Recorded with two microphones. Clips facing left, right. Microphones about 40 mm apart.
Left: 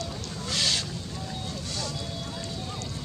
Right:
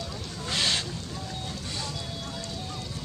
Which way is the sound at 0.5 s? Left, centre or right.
Right.